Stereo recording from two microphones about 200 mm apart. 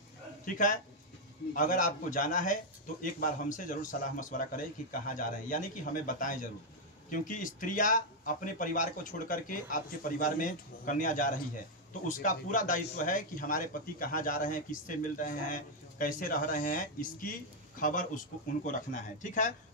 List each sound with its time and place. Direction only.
1.5 s a man's voice: 45° left (ahead or behind)